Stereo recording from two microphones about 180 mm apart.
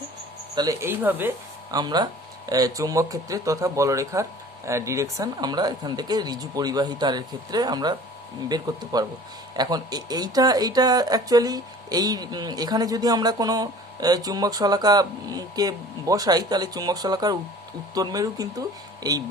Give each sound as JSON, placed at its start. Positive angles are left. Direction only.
{"t": 0.5, "sound": "speech", "side_deg": -20}
{"t": 1.7, "sound": "speech", "side_deg": -20}